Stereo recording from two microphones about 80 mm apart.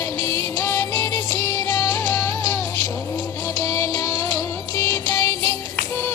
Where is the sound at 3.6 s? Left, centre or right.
Left.